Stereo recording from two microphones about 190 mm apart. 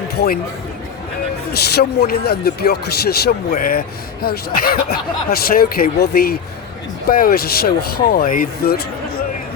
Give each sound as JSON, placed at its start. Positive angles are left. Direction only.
{"t": 1.5, "sound": "speech", "side_deg": 60}